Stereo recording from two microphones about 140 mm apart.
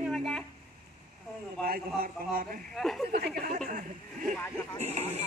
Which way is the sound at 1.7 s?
90° right.